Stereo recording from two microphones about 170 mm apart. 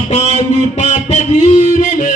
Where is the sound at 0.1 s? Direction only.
40° left (ahead or behind).